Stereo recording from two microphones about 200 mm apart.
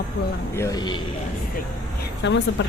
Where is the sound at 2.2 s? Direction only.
65° left (ahead or behind).